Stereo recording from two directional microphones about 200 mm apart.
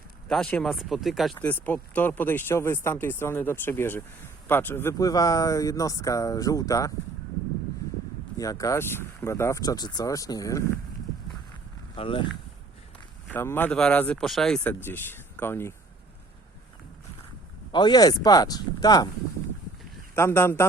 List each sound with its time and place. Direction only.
0.3 s speech: 5° left (ahead or behind)
8.4 s speech: 15° left (ahead or behind)
11.9 s speech: 25° left (ahead or behind)
13.2 s speech: 10° left (ahead or behind)
17.7 s speech: 20° left (ahead or behind)
20.1 s speech: 10° left (ahead or behind)